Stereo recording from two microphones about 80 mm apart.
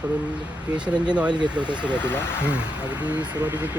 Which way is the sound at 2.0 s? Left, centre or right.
Left.